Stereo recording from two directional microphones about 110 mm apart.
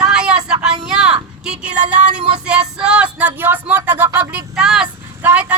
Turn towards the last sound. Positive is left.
turn(degrees=-15)  # may be behind; listen again after turning